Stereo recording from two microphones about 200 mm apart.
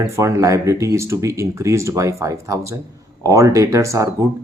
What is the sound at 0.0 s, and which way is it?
Speech, 15° right (ahead or behind).